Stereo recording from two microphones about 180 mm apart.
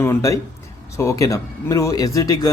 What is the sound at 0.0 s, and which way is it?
Speech, 15° left (ahead or behind).